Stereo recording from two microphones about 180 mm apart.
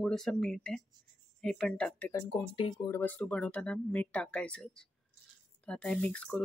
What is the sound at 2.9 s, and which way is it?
Speech, 10° left (ahead or behind).